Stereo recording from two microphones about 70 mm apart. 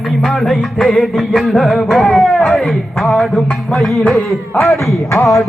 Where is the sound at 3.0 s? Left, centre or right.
Centre.